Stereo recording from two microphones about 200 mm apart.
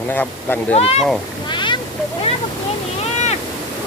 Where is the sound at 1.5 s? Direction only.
25° left (ahead or behind).